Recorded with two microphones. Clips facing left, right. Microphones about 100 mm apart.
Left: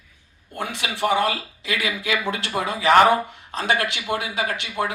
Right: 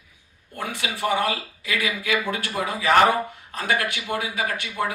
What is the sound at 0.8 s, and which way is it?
Speech, 25° left (ahead or behind).